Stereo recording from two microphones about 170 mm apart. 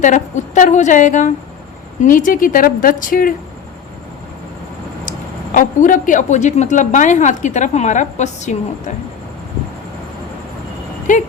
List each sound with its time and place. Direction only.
0.0 s a woman's voice: 50° left (ahead or behind)
5.0 s speech: 50° left (ahead or behind)
11.1 s speech: 50° left (ahead or behind)